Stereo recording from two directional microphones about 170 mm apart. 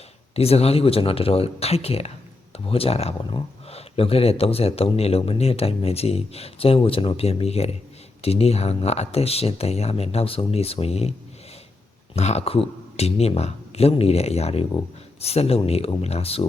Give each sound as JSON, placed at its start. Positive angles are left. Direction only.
{"t": 0.3, "sound": "speech", "side_deg": 35}
{"t": 12.1, "sound": "speech", "side_deg": 40}